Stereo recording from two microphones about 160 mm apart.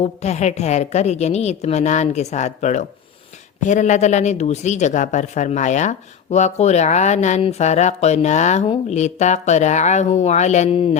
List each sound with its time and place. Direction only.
0.0 s speech: 45° left (ahead or behind)